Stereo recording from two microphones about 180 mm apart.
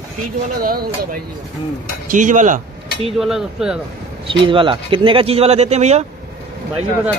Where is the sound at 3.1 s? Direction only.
5° right (ahead or behind).